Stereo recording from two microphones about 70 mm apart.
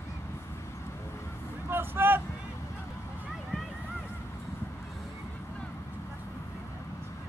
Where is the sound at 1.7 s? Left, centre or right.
Right.